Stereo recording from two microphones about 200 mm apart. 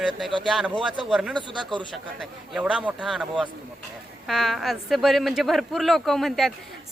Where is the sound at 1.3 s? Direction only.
25° right (ahead or behind).